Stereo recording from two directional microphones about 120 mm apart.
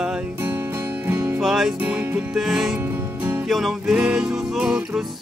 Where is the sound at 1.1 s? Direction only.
20° right (ahead or behind).